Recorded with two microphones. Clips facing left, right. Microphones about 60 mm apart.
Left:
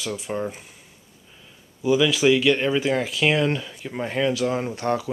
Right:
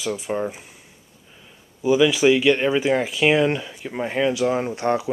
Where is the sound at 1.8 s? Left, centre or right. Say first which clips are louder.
Right 2 dB; centre.